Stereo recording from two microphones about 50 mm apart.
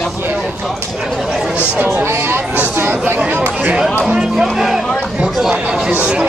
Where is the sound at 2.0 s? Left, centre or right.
Right.